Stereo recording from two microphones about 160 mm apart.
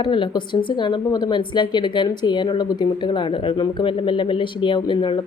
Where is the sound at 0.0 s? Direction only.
30° left (ahead or behind).